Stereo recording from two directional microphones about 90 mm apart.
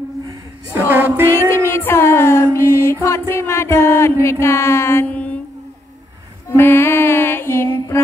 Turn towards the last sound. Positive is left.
turn(degrees=25)  # may be behind; listen again after turning